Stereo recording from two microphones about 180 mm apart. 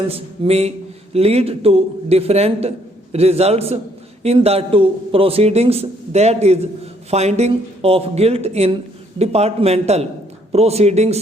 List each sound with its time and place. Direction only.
0.1 s a man's voice: 35° right (ahead or behind)